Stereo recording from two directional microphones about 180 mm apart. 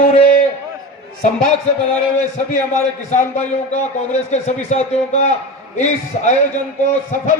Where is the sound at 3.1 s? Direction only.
40° left (ahead or behind).